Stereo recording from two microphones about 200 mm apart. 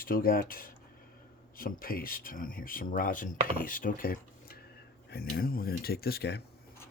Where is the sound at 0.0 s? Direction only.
45° left (ahead or behind).